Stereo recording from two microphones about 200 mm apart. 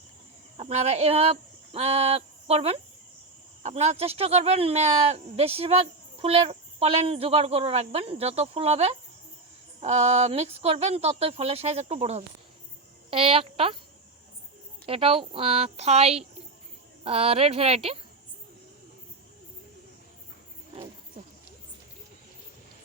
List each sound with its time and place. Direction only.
0.5 s a woman's voice: 35° right (ahead or behind)
14.8 s a woman's voice: 30° right (ahead or behind)